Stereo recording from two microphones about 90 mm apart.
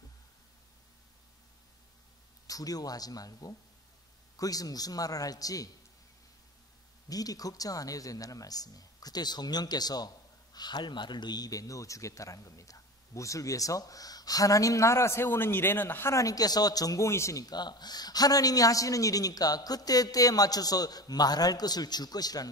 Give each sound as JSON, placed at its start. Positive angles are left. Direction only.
{"t": 2.4, "sound": "speech", "side_deg": 45}
{"t": 7.1, "sound": "speech", "side_deg": 45}
{"t": 16.1, "sound": "speech", "side_deg": 40}